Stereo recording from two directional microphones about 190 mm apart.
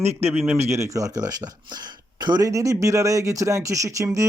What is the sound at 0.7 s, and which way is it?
Speech, 15° right (ahead or behind).